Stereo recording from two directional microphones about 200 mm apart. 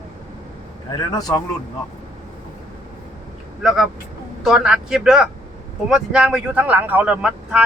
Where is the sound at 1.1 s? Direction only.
20° left (ahead or behind).